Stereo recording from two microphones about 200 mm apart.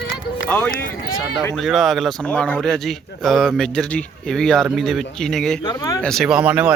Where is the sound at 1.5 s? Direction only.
Centre (ahead or behind).